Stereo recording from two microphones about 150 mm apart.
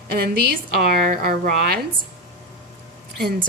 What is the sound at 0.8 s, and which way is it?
Speech, 80° right.